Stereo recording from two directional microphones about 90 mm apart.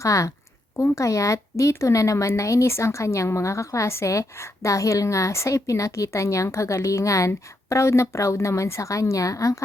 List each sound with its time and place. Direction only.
0.0 s speech: 35° left (ahead or behind)